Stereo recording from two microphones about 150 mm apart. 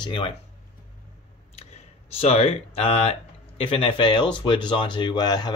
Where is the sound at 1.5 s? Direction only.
45° left (ahead or behind).